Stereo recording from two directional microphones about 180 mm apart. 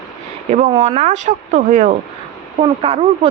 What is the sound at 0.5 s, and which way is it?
A woman's voice, 35° right (ahead or behind).